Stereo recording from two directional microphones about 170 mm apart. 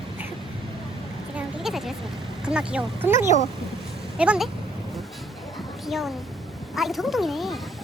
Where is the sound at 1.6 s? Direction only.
Centre (ahead or behind).